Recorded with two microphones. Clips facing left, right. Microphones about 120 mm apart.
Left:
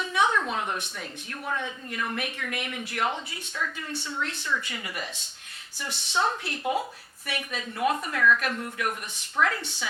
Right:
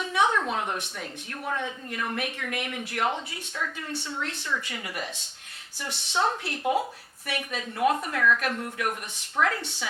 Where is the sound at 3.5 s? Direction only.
40° right (ahead or behind).